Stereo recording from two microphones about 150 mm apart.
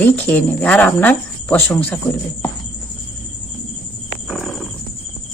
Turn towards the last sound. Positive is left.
turn(degrees=0)  # may be behind; listen again after turning